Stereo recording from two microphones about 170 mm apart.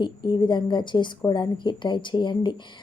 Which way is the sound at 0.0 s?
25° left (ahead or behind).